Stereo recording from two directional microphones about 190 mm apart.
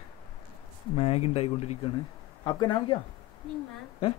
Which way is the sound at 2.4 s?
25° left (ahead or behind).